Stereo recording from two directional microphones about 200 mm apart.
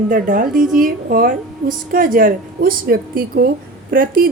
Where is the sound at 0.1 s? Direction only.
45° right (ahead or behind).